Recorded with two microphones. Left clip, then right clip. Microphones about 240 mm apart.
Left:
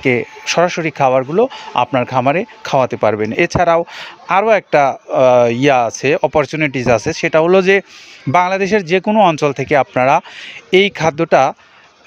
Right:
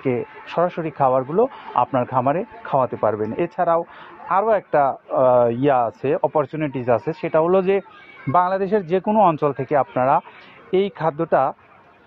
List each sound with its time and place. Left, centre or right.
0.0 s speech: left